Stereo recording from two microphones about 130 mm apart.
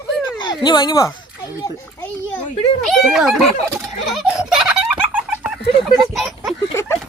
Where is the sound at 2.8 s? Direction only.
Centre (ahead or behind).